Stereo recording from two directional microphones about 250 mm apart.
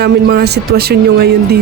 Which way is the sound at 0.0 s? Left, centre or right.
Right.